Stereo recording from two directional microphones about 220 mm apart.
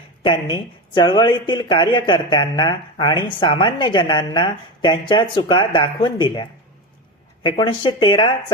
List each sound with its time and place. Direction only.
0.2 s speech: 20° left (ahead or behind)